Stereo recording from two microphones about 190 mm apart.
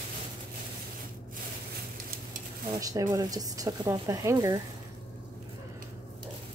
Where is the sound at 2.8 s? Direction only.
20° right (ahead or behind).